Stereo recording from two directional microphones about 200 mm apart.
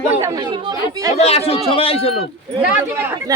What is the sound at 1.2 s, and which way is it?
A man's voice, 30° left (ahead or behind).